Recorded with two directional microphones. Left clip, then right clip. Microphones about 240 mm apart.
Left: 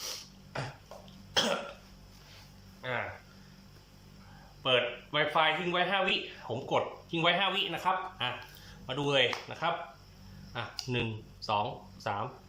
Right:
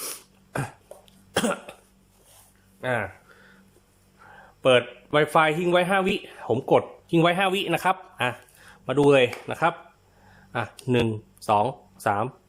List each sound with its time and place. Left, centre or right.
1.3 s cough: right
2.8 s speech: right
4.6 s speech: right